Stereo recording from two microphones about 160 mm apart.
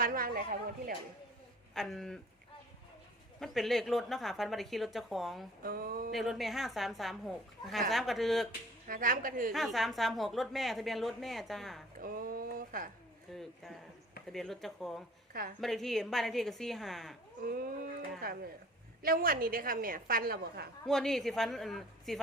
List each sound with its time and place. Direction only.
0.0 s a woman's voice: 60° right (ahead or behind)
1.7 s a woman's voice: centre (ahead or behind)
3.4 s a woman's voice: centre (ahead or behind)
5.6 s a woman's voice: 65° right (ahead or behind)
6.1 s a woman's voice: centre (ahead or behind)
8.9 s a woman's voice: 60° right (ahead or behind)
9.5 s a woman's voice: centre (ahead or behind)
11.9 s a woman's voice: 60° right (ahead or behind)
13.3 s a woman's voice: centre (ahead or behind)
15.3 s speech: 60° right (ahead or behind)
15.6 s a woman's voice: centre (ahead or behind)
17.4 s a woman's voice: 70° right (ahead or behind)
20.8 s a woman's voice: centre (ahead or behind)